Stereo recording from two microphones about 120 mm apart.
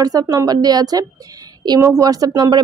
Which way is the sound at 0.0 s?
30° right (ahead or behind).